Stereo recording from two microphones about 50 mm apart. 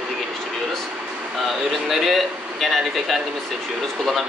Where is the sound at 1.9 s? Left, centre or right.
Centre.